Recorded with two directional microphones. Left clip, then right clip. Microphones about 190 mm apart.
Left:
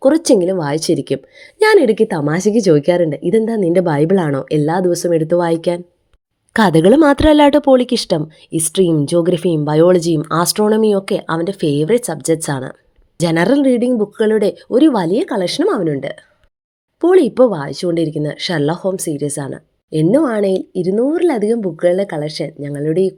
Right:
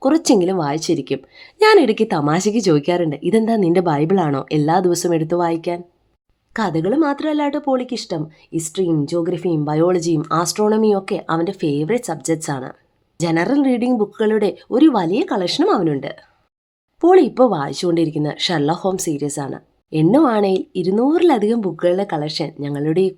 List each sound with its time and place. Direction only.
0.0 s a woman's voice: 15° left (ahead or behind)
6.5 s speech: 35° left (ahead or behind)
13.6 s a woman's voice: 15° left (ahead or behind)